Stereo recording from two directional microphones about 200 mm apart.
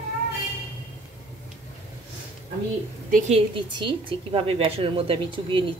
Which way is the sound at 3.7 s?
25° right (ahead or behind).